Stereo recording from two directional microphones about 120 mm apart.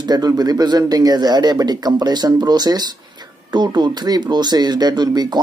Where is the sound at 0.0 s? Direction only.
35° right (ahead or behind).